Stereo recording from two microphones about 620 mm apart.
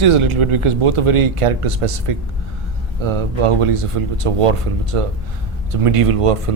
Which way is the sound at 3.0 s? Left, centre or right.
Right.